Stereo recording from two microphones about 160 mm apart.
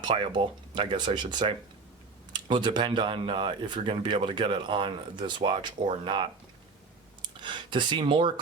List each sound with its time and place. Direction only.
0.0 s speech: 30° right (ahead or behind)